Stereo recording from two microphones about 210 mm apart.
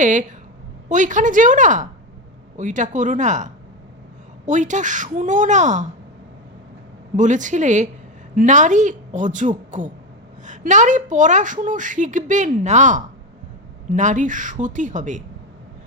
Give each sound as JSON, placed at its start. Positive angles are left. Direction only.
{"t": 0.0, "sound": "a woman's voice", "side_deg": -35}
{"t": 7.2, "sound": "a woman's voice", "side_deg": -35}